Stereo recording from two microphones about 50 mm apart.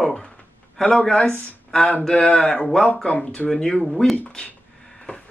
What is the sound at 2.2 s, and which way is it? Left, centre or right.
Speech, left.